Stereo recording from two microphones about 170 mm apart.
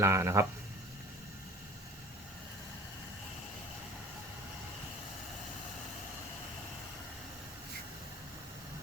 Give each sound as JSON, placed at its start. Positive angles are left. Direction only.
{"t": 0.0, "sound": "speech", "side_deg": -15}